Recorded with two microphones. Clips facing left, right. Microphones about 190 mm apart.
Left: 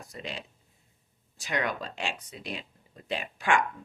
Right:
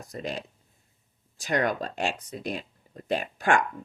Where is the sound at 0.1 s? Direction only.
45° right (ahead or behind).